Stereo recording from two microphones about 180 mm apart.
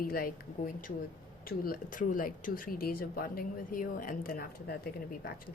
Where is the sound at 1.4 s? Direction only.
55° left (ahead or behind).